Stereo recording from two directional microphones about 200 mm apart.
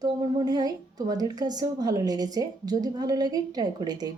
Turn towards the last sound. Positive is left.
turn(degrees=-20)  # may be behind; listen again after turning